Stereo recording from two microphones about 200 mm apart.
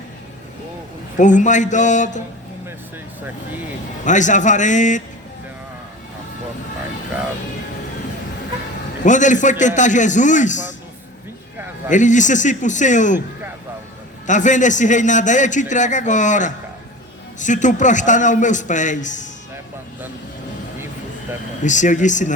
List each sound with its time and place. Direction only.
1.1 s a man's voice: 40° left (ahead or behind)
4.0 s a man's voice: 40° left (ahead or behind)
9.0 s a man's voice: 40° left (ahead or behind)
11.9 s a man's voice: 40° left (ahead or behind)
14.3 s a man's voice: 40° left (ahead or behind)
21.6 s a man's voice: 40° left (ahead or behind)